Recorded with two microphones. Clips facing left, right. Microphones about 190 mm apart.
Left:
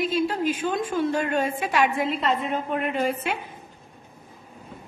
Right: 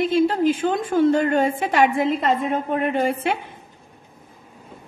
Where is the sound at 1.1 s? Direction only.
55° right (ahead or behind).